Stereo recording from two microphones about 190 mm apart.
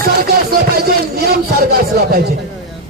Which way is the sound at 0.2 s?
55° right (ahead or behind).